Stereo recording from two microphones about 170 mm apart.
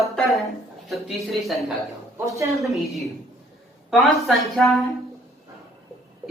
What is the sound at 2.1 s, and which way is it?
Speech, 15° right (ahead or behind).